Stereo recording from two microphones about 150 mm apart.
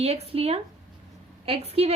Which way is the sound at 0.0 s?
40° right (ahead or behind).